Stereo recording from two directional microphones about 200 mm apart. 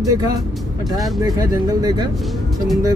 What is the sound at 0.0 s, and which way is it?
Speech, 15° right (ahead or behind).